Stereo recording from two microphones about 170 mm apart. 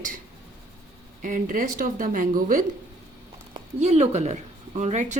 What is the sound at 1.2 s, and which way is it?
Speech, 50° right (ahead or behind).